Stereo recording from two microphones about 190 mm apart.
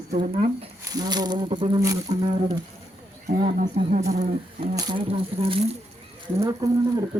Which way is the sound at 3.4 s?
40° right (ahead or behind).